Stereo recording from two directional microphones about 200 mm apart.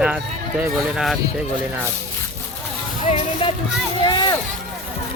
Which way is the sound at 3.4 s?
25° left (ahead or behind).